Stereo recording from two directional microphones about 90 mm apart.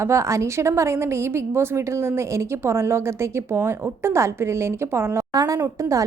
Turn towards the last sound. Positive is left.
turn(degrees=-35)  # may be behind; listen again after turning